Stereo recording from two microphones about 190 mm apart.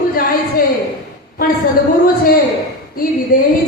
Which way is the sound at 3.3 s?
45° left (ahead or behind).